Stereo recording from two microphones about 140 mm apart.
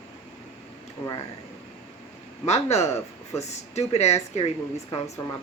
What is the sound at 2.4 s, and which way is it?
Speech, 50° left (ahead or behind).